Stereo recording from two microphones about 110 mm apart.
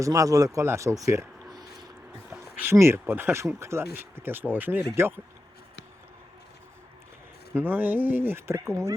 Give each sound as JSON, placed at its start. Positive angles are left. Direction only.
{"t": 0.0, "sound": "speech", "side_deg": -30}
{"t": 2.7, "sound": "speech", "side_deg": -25}
{"t": 7.5, "sound": "speech", "side_deg": -15}